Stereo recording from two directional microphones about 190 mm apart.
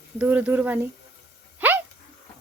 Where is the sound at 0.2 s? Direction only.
10° right (ahead or behind).